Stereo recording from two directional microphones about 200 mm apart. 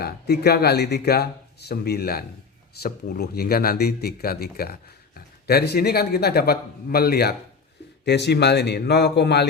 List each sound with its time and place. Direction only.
0.0 s speech: 50° left (ahead or behind)